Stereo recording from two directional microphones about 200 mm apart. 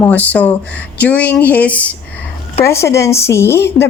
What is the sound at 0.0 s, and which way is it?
A woman's voice, 10° left (ahead or behind).